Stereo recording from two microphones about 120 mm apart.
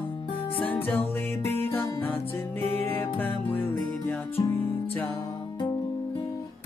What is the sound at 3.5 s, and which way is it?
Music, 15° left (ahead or behind).